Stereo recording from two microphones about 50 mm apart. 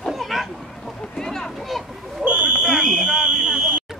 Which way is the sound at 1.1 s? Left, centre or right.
Centre.